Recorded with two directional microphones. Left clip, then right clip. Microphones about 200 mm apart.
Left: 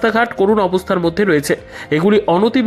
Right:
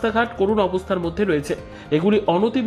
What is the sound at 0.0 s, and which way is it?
Speech, 20° left (ahead or behind).